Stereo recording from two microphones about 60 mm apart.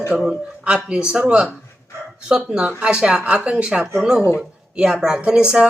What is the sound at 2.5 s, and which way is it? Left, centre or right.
Speech, centre.